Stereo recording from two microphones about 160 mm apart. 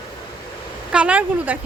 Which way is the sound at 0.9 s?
10° right (ahead or behind).